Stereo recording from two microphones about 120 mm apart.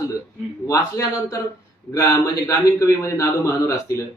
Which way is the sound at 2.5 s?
25° left (ahead or behind).